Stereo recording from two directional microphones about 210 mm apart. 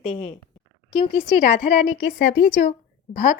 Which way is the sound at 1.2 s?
30° left (ahead or behind).